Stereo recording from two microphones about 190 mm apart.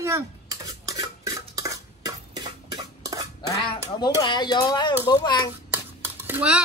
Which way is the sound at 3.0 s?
20° right (ahead or behind).